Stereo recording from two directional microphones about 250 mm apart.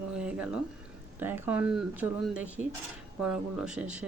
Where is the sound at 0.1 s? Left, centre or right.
Centre.